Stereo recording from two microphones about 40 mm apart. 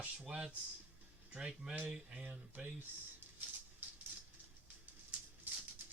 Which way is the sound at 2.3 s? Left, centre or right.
Right.